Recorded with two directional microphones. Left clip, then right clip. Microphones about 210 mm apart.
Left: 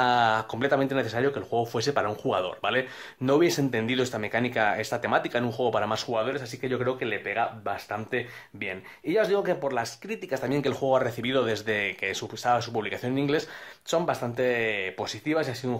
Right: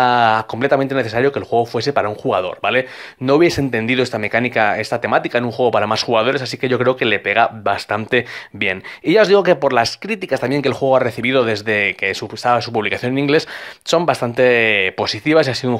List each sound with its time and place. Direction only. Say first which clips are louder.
0.0 s speech: right 9 dB; 25° right (ahead or behind)
6.0 s speech: right 12 dB; 40° right (ahead or behind)